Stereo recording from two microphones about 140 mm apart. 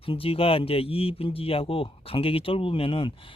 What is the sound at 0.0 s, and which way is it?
Speech, 40° left (ahead or behind).